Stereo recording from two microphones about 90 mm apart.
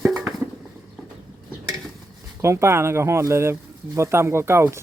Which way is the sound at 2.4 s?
30° right (ahead or behind).